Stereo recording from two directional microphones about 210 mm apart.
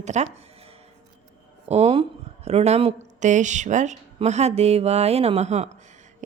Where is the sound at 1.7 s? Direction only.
30° right (ahead or behind).